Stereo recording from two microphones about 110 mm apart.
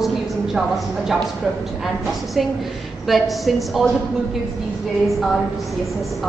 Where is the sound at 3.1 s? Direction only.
Centre (ahead or behind).